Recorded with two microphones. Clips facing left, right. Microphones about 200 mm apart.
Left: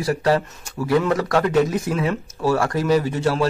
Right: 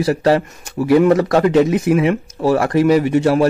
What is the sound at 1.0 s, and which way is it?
A man's voice, 25° right (ahead or behind).